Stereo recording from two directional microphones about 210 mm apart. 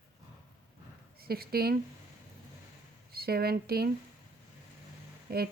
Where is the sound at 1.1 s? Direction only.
45° right (ahead or behind).